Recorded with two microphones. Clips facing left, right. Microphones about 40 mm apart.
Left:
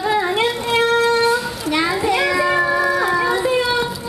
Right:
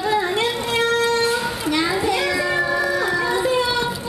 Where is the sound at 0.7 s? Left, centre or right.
Centre.